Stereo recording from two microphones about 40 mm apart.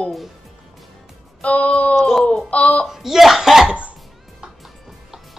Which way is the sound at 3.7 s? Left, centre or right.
Right.